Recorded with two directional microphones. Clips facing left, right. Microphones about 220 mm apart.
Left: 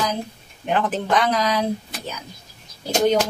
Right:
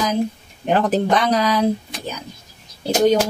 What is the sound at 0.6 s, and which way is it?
Speech, 40° right (ahead or behind).